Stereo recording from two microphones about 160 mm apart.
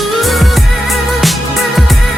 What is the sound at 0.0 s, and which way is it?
Music, centre (ahead or behind).